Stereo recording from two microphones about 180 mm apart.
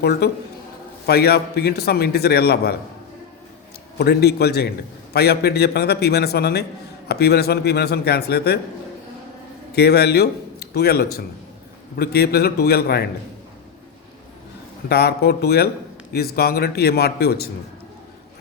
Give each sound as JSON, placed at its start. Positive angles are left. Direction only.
{"t": 0.0, "sound": "a man's voice", "side_deg": 65}
{"t": 3.9, "sound": "a man's voice", "side_deg": 65}
{"t": 9.7, "sound": "a man's voice", "side_deg": 65}
{"t": 14.8, "sound": "a man's voice", "side_deg": 65}